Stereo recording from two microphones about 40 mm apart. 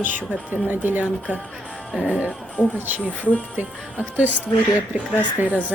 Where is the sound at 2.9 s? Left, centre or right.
Right.